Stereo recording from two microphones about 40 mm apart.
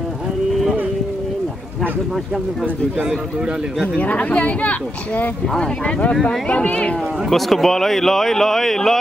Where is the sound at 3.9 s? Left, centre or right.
Left.